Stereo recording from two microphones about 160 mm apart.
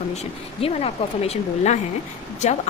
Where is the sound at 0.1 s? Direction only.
40° left (ahead or behind).